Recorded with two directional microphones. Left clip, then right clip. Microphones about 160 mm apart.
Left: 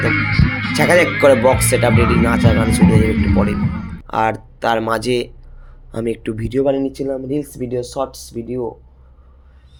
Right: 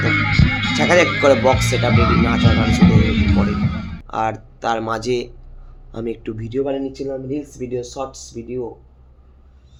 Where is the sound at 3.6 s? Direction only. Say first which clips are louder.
Left 1 dB; centre (ahead or behind).